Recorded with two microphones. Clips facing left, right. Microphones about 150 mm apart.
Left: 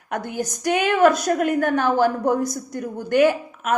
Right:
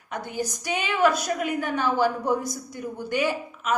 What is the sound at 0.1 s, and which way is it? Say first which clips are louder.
A woman's voice: left 4 dB; 50° left (ahead or behind).